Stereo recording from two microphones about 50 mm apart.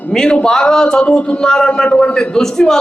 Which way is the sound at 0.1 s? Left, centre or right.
Centre.